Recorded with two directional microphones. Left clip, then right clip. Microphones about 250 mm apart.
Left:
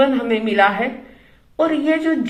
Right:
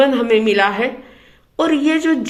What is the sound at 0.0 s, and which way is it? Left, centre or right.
A woman's voice, right.